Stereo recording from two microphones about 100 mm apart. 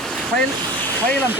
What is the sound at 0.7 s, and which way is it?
Vehicle, 45° right (ahead or behind).